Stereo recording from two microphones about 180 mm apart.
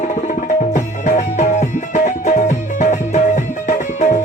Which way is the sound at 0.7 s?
40° left (ahead or behind).